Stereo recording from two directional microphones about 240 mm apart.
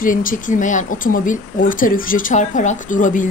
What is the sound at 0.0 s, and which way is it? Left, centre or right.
Speech, left.